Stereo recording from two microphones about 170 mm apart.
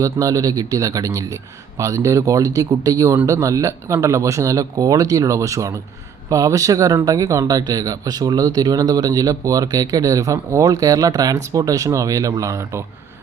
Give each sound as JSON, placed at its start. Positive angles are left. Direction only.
{"t": 0.0, "sound": "speech", "side_deg": -20}